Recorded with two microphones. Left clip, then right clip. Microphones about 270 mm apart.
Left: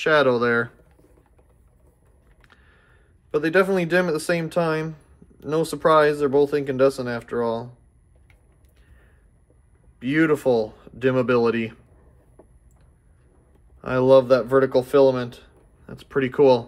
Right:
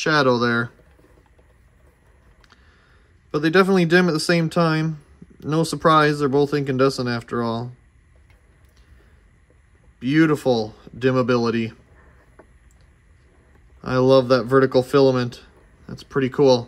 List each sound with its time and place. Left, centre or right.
0.0 s speech: centre
2.4 s a sound: centre
3.3 s speech: centre
9.9 s speech: centre
13.7 s speech: centre